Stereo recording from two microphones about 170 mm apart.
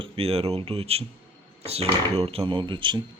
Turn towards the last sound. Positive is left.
turn(degrees=-30)  # may be behind; listen again after turning